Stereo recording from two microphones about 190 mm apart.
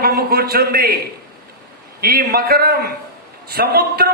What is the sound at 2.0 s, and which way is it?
A man's voice, 50° right (ahead or behind).